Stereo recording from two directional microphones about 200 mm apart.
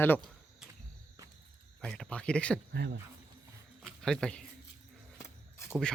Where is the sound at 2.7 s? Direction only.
55° right (ahead or behind).